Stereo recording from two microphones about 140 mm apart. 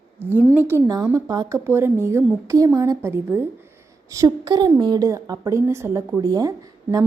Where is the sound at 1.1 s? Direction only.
25° right (ahead or behind).